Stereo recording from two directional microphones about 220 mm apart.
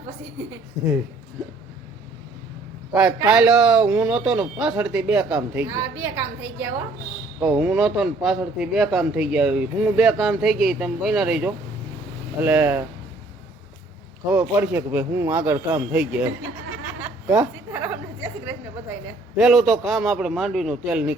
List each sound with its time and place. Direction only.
2.9 s a man's voice: 5° right (ahead or behind)
14.3 s a man's voice: 10° right (ahead or behind)
17.2 s a sound: 10° right (ahead or behind)
19.4 s speech: centre (ahead or behind)